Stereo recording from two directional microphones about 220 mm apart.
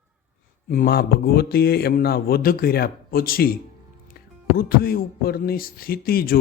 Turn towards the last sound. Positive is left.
turn(degrees=40)  # may be behind; listen again after turning